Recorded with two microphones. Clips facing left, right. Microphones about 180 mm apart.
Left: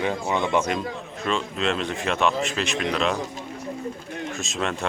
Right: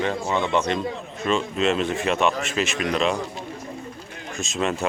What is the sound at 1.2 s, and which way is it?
Speech, centre (ahead or behind).